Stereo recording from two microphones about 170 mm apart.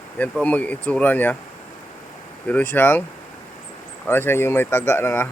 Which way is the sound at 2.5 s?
10° left (ahead or behind).